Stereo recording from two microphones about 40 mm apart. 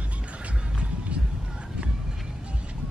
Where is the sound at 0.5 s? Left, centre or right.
Right.